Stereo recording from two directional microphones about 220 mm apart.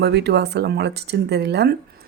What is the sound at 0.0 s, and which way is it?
Speech, 50° right (ahead or behind).